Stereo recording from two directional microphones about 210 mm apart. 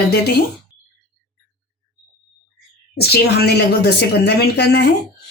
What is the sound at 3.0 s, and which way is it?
Speech, 50° left (ahead or behind).